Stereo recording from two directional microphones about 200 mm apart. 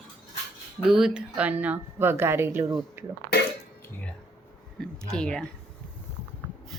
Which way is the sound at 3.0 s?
10° right (ahead or behind).